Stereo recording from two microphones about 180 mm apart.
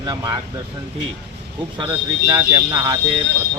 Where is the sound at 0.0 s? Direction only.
25° right (ahead or behind).